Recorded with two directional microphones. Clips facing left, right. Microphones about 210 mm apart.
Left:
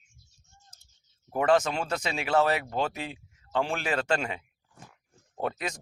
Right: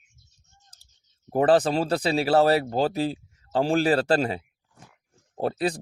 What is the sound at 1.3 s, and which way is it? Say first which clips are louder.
Speech: right 5 dB; 35° right (ahead or behind).